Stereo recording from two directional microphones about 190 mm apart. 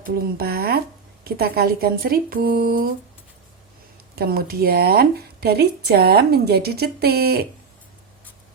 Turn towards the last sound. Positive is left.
turn(degrees=-55)  # may be behind; listen again after turning